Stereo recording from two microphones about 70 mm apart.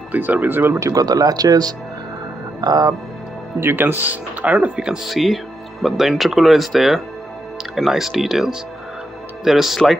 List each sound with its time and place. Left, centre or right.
0.1 s speech: right
0.7 s speech: right
3.5 s speech: right
3.8 s speech: right; by 9.9 s centre